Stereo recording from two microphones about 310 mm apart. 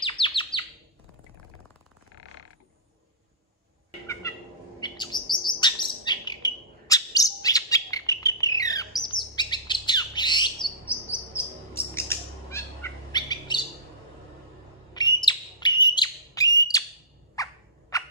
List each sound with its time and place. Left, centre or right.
0.2 s chirp: centre
4.2 s bird: centre
4.7 s chirp: centre
15.0 s bird: centre
17.4 s rodents: centre